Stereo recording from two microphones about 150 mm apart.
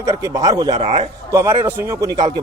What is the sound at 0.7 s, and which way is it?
Speech, 40° right (ahead or behind).